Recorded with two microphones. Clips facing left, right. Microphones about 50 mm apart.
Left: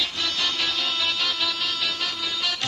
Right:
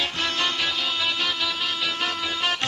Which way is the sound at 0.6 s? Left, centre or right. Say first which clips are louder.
Right 1 dB; centre.